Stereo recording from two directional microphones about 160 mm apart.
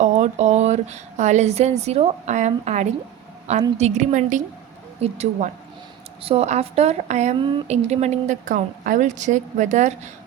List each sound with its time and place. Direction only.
0.0 s speech: 45° right (ahead or behind)
4.9 s a woman's voice: 40° right (ahead or behind)